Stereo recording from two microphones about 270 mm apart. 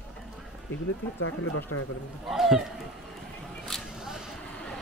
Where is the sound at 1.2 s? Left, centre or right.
Left.